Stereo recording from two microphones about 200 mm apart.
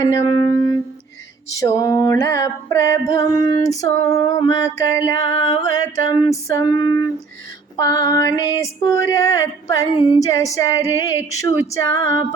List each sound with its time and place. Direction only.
0.0 s speech: 15° left (ahead or behind)
1.5 s female singing: 15° left (ahead or behind)